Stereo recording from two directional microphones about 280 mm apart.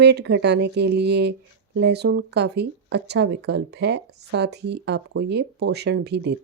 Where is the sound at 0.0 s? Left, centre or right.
Right.